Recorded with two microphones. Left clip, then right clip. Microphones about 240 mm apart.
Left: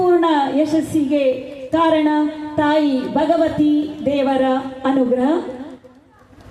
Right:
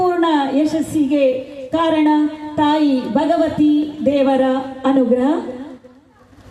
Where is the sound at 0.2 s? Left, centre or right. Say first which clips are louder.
Even; right.